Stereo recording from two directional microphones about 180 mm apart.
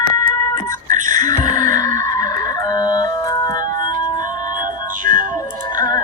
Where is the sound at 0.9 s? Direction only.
45° right (ahead or behind).